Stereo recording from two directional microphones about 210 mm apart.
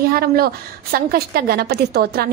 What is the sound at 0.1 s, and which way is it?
A woman's voice, 45° right (ahead or behind).